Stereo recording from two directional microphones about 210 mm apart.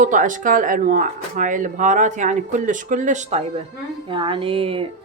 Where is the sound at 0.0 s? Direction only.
40° right (ahead or behind).